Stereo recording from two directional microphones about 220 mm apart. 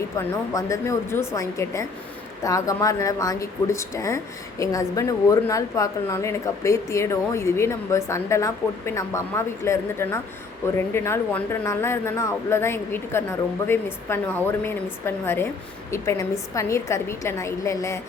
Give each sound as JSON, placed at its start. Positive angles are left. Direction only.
{"t": 0.5, "sound": "a woman's voice", "side_deg": 15}